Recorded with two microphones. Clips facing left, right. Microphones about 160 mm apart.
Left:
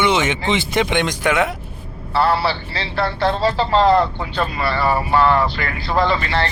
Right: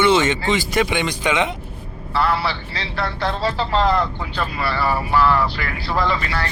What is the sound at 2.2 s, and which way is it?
A man's voice, 30° left (ahead or behind).